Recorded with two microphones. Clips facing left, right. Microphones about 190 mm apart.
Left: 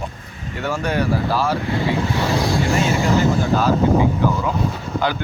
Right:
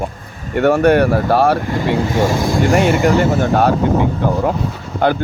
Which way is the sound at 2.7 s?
65° right (ahead or behind).